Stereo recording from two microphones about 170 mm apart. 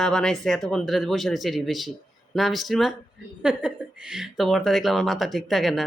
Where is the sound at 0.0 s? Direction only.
5° left (ahead or behind).